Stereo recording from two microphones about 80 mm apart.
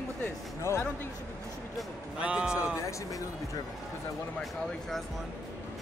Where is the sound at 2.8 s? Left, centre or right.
Left.